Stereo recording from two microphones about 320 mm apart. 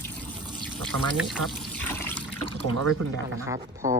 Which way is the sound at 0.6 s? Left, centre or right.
Centre.